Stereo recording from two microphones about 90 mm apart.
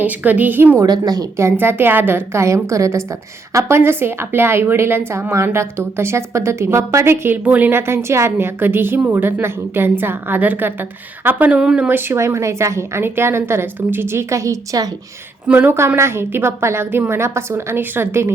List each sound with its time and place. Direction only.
0.0 s a woman's voice: 20° right (ahead or behind)
0.9 s a woman's voice: 45° right (ahead or behind)
1.4 s a woman's voice: 25° right (ahead or behind); by 11.9 s 10° right (ahead or behind)
11.9 s a woman's voice: 25° right (ahead or behind)
15.4 s a woman's voice: 25° right (ahead or behind)